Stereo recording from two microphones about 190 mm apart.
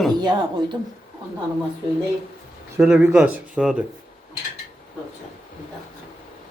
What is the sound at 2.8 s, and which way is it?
A man's voice, 5° right (ahead or behind).